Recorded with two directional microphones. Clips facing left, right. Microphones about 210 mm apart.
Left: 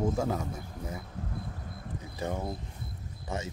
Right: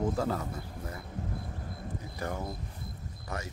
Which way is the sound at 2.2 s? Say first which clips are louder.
Left 3 dB; 20° left (ahead or behind).